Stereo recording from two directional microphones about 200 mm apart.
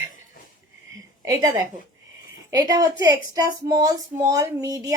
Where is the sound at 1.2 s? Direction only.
15° right (ahead or behind).